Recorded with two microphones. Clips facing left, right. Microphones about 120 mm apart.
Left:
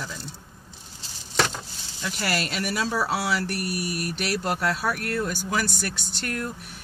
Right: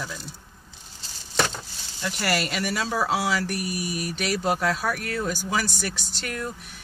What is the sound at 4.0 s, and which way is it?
Speech, centre (ahead or behind).